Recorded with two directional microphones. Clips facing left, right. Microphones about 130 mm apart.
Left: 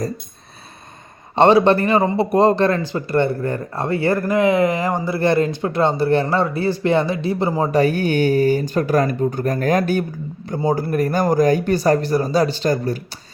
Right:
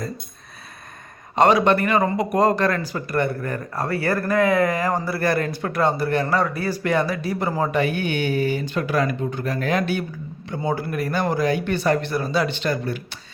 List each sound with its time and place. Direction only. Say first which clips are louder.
1.4 s speech: left 4 dB; 30° left (ahead or behind)
7.7 s speech: left 5 dB; 40° left (ahead or behind)